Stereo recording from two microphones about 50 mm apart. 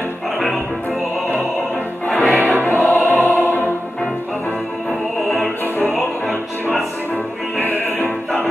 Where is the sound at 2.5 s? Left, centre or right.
Left.